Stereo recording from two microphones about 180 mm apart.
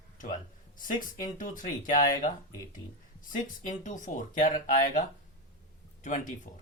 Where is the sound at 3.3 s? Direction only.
45° left (ahead or behind).